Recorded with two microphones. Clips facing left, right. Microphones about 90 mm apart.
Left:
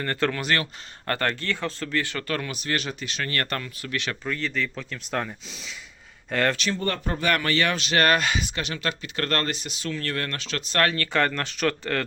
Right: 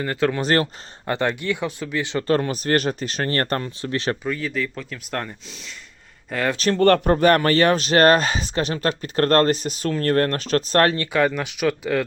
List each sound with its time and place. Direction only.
0.0 s speech: 10° right (ahead or behind)
0.3 s speech: 35° right (ahead or behind)
1.0 s speech: 15° right (ahead or behind); by 4.2 s 30° right (ahead or behind)
4.2 s speech: 5° right (ahead or behind)
6.3 s speech: 5° right (ahead or behind)
6.7 s speech: 60° right (ahead or behind)
7.2 s speech: 40° right (ahead or behind)
11.3 s speech: 10° right (ahead or behind)